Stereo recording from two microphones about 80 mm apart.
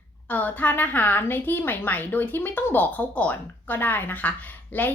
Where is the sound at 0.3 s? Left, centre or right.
Left.